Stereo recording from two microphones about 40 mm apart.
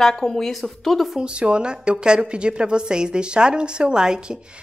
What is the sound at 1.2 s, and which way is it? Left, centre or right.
A woman's voice, right.